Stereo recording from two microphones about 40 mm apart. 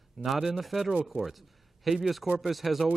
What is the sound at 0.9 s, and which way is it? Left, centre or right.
Speech, right.